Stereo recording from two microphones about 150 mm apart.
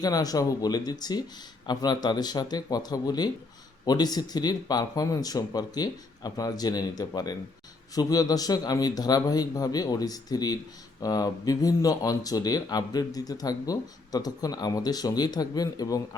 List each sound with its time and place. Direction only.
0.0 s speech: 25° left (ahead or behind)